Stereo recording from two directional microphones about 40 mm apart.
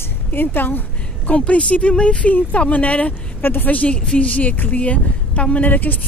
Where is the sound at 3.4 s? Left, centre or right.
Left.